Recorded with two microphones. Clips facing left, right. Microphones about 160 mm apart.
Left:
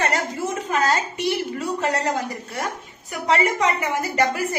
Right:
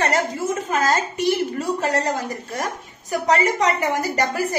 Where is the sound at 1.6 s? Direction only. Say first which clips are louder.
Right 2 dB; 45° right (ahead or behind).